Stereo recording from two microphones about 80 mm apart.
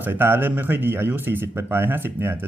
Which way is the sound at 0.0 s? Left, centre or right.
Right.